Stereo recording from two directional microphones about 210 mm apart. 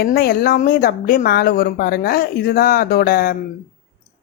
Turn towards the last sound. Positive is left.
turn(degrees=45)  # may be behind; listen again after turning